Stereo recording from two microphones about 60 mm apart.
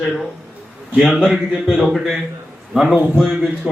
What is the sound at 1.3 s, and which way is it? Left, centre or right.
Speech, centre.